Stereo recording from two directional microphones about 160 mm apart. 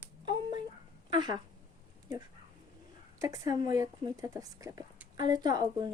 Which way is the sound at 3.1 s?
20° right (ahead or behind).